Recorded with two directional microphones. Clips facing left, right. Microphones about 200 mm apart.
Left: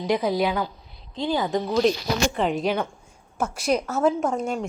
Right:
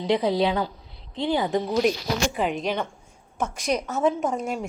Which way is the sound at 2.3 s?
Centre (ahead or behind).